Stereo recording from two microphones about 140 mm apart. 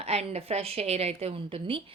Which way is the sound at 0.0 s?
45° right (ahead or behind).